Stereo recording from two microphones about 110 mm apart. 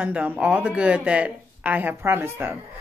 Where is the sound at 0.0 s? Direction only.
15° right (ahead or behind).